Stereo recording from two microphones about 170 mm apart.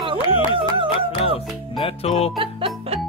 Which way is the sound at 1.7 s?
35° left (ahead or behind).